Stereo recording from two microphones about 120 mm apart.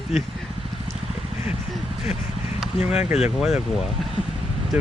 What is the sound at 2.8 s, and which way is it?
Speech, 60° left (ahead or behind).